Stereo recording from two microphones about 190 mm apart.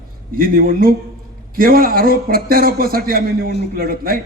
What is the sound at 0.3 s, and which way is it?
A man's voice, 50° right (ahead or behind).